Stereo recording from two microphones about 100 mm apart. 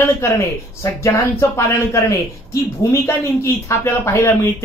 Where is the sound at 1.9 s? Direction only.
30° left (ahead or behind).